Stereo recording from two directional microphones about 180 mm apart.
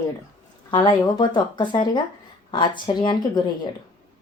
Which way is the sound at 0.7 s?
25° left (ahead or behind).